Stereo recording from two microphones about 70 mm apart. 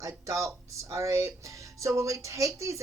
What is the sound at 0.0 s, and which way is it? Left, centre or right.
Speech, right.